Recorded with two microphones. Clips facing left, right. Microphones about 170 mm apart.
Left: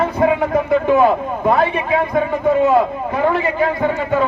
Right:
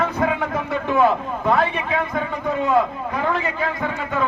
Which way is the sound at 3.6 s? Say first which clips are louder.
Left 7 dB; 40° left (ahead or behind).